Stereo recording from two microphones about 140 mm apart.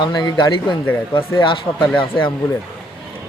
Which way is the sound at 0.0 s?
30° left (ahead or behind).